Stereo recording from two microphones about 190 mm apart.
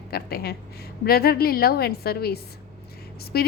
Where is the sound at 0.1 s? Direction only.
55° left (ahead or behind).